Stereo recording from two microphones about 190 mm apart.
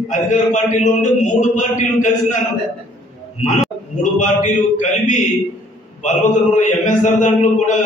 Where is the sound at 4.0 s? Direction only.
40° left (ahead or behind).